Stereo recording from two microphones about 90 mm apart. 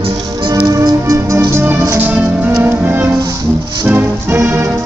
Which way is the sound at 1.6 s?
20° right (ahead or behind).